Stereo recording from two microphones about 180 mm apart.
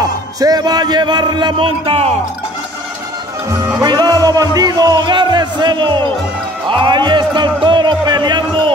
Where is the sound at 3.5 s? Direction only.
15° right (ahead or behind).